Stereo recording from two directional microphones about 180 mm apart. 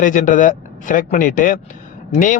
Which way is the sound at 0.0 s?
45° left (ahead or behind).